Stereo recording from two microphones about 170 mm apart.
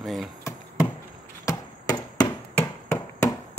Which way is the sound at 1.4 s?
20° left (ahead or behind).